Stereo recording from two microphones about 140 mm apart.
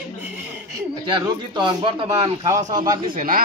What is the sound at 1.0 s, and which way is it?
Speech, 35° right (ahead or behind).